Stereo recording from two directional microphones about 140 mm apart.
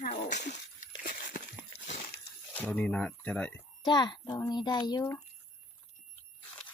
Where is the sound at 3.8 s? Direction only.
30° left (ahead or behind).